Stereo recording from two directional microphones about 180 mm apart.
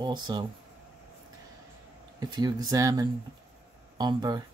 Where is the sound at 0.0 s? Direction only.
25° right (ahead or behind).